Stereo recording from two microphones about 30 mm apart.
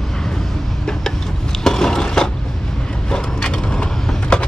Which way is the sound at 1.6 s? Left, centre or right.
Centre.